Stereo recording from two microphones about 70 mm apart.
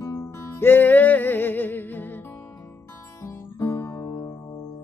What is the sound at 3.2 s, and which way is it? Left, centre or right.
Music, left.